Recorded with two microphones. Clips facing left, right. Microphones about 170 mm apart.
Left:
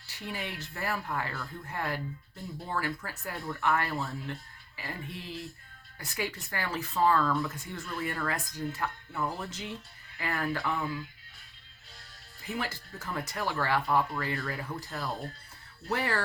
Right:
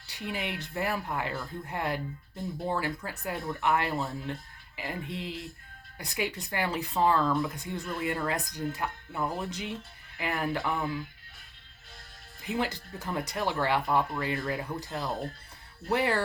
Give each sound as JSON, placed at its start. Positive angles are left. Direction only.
{"t": 0.1, "sound": "speech", "side_deg": -20}
{"t": 12.4, "sound": "speech", "side_deg": -20}